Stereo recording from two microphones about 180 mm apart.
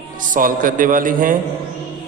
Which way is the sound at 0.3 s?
50° right (ahead or behind).